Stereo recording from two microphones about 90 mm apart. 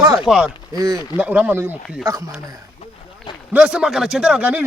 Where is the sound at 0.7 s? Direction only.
40° right (ahead or behind).